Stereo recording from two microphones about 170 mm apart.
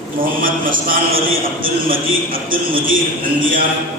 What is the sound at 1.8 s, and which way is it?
Speech, 55° right (ahead or behind).